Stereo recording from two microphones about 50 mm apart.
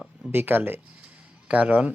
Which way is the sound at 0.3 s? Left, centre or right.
Right.